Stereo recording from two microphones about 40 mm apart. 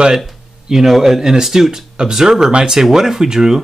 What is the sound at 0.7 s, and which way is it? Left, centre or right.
Speech, centre.